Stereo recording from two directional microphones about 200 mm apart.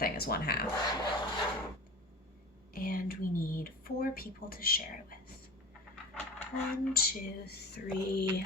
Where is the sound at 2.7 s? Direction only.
45° left (ahead or behind).